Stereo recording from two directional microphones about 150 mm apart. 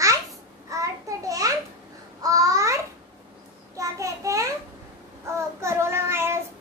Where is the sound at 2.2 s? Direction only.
25° right (ahead or behind).